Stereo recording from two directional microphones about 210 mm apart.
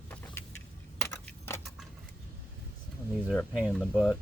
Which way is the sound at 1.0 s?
10° left (ahead or behind).